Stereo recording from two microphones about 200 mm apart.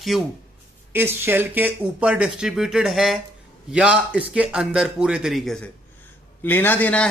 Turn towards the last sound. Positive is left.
turn(degrees=5)  # may be behind; listen again after turning